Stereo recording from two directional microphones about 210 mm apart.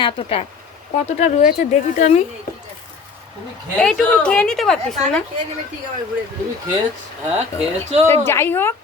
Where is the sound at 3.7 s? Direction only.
5° left (ahead or behind).